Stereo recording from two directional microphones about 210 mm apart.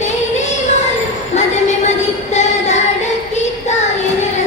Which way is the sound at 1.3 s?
35° left (ahead or behind).